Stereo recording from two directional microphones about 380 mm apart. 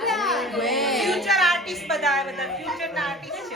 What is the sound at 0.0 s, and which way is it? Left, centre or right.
Child singing, centre.